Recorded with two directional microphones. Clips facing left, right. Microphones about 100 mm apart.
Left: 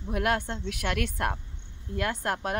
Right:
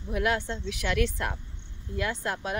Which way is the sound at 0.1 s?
50° left (ahead or behind).